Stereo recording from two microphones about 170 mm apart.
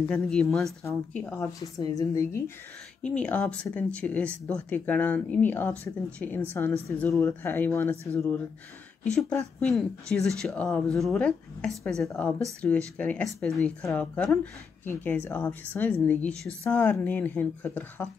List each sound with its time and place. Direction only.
0.1 s speech: 5° left (ahead or behind)
9.0 s speech: 5° left (ahead or behind)